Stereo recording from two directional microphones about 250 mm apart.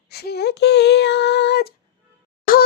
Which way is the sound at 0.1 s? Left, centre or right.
Left.